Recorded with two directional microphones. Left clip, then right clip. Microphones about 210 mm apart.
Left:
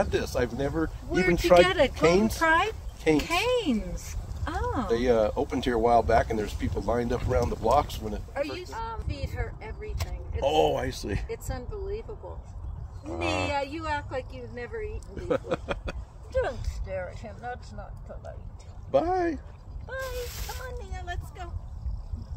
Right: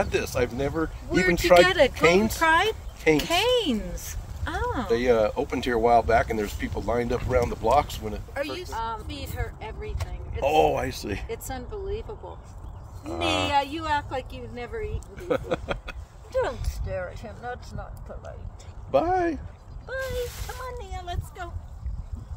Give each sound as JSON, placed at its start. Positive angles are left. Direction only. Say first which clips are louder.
{"t": 0.0, "sound": "speech", "louder": "right 2 dB", "side_deg": 0}
{"t": 1.6, "sound": "speech", "louder": "right 3 dB", "side_deg": -50}
{"t": 2.0, "sound": "speech", "louder": "right 2 dB", "side_deg": -5}
{"t": 2.4, "sound": "speech", "louder": "right 3 dB", "side_deg": -45}
{"t": 4.8, "sound": "speech", "louder": "right 2 dB", "side_deg": -5}
{"t": 8.4, "sound": "speech", "louder": "right 2 dB", "side_deg": -45}
{"t": 10.4, "sound": "speech", "louder": "right 3 dB", "side_deg": 0}
{"t": 11.2, "sound": "speech", "louder": "right 2 dB", "side_deg": -35}
{"t": 13.5, "sound": "speech", "louder": "right 5 dB", "side_deg": -35}
{"t": 15.1, "sound": "a sound", "louder": "right 2 dB", "side_deg": 5}
{"t": 16.3, "sound": "speech", "louder": "right 2 dB", "side_deg": -25}
{"t": 18.9, "sound": "speech", "louder": "right 2 dB", "side_deg": -5}
{"t": 20.8, "sound": "speech", "louder": "right 3 dB", "side_deg": -25}